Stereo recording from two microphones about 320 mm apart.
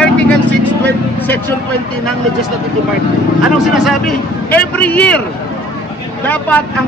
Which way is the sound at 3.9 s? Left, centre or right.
Centre.